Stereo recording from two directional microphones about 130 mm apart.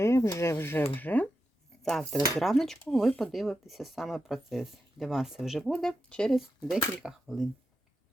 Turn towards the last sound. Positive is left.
turn(degrees=0)  # may be behind; listen again after turning